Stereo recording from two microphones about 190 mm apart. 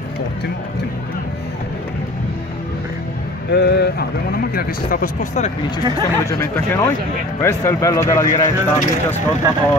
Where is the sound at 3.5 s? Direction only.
60° left (ahead or behind); by 5.5 s 45° left (ahead or behind).